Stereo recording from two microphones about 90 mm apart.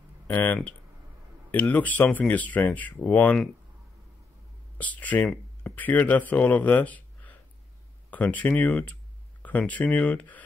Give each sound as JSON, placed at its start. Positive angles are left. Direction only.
{"t": 0.3, "sound": "speech", "side_deg": 20}
{"t": 4.7, "sound": "speech", "side_deg": 15}